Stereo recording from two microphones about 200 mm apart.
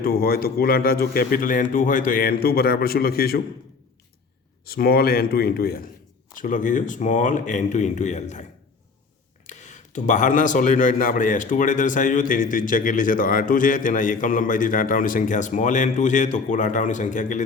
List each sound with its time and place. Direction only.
0.0 s a man's voice: 50° left (ahead or behind)
4.6 s a man's voice: 50° left (ahead or behind)
9.5 s speech: 35° left (ahead or behind)